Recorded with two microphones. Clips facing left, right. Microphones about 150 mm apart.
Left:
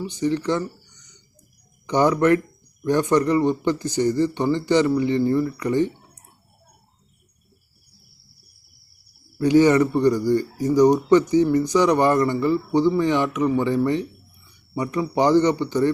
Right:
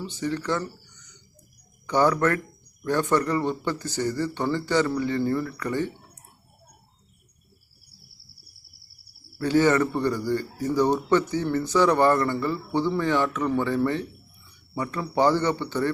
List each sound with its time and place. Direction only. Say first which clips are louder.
0.0 s speech: left 6 dB; 15° left (ahead or behind)
1.9 s a man's voice: left 4 dB; 20° left (ahead or behind)
9.4 s a man's voice: left 5 dB; 15° left (ahead or behind)